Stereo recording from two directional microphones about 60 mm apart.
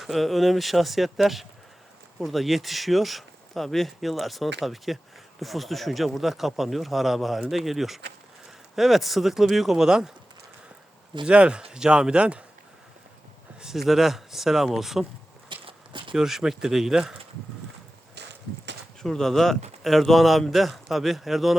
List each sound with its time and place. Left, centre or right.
0.0 s speech: centre
11.3 s speech: centre
13.6 s speech: centre
16.1 s speech: centre
19.0 s speech: centre